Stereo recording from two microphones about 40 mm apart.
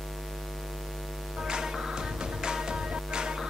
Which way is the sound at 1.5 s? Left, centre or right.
Centre.